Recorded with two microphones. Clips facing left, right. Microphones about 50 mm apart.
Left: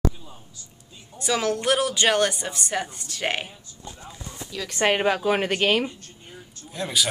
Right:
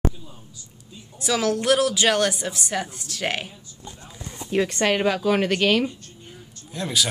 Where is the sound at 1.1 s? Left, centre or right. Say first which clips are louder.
Right 1 dB; centre.